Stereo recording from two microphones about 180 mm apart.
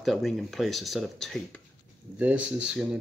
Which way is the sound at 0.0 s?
Centre (ahead or behind).